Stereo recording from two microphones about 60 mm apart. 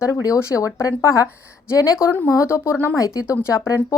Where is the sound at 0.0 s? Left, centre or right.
Left.